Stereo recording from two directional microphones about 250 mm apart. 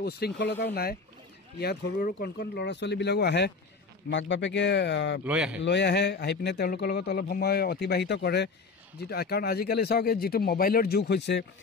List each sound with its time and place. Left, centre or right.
0.0 s speech: left
5.2 s speech: centre
5.6 s speech: left